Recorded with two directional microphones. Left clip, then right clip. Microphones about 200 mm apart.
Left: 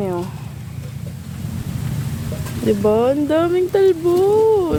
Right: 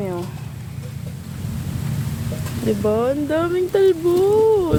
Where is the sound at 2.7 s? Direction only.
50° left (ahead or behind).